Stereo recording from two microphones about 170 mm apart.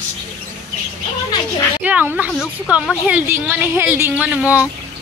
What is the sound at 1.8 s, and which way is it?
A woman's voice, 10° right (ahead or behind).